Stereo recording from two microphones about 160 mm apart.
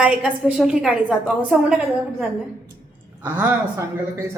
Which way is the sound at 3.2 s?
10° right (ahead or behind).